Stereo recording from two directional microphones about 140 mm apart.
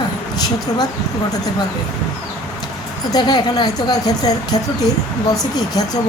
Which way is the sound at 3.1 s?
30° left (ahead or behind).